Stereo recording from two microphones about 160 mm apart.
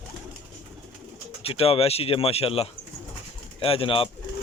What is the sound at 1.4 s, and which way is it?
Speech, 35° left (ahead or behind).